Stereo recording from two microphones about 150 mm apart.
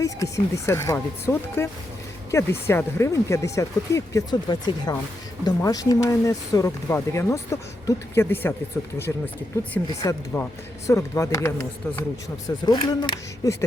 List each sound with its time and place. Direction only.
0.0 s speech: 20° left (ahead or behind)
12.5 s speech: 30° left (ahead or behind)